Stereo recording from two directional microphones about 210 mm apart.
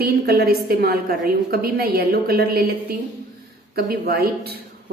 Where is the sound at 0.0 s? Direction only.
45° right (ahead or behind).